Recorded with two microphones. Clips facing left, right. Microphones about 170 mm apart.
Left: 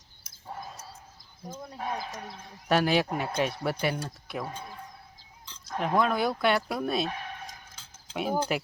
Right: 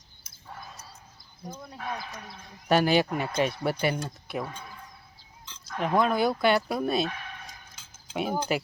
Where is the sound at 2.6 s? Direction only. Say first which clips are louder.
Right 2 dB; centre (ahead or behind).